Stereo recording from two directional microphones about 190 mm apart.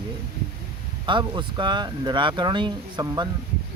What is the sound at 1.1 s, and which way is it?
Speech, 25° right (ahead or behind).